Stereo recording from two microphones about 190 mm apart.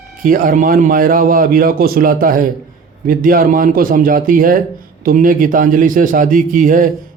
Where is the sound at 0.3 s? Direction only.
45° right (ahead or behind).